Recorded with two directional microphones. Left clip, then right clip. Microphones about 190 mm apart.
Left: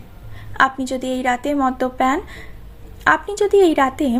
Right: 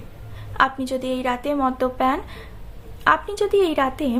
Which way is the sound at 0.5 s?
20° left (ahead or behind).